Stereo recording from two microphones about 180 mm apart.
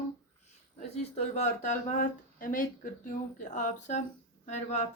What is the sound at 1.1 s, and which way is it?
Speech, 40° left (ahead or behind).